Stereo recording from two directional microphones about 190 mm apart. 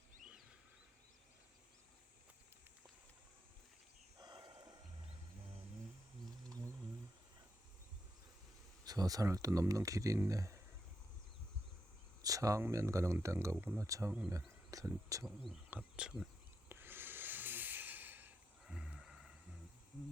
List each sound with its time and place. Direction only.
4.2 s a sound: 20° right (ahead or behind)
4.6 s wild animals: 25° right (ahead or behind)
8.8 s speech: 20° right (ahead or behind)
12.2 s speech: 20° right (ahead or behind)
15.4 s speech: 5° right (ahead or behind)
16.6 s snort: 10° right (ahead or behind)